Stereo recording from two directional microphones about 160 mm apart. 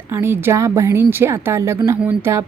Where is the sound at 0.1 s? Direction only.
15° right (ahead or behind).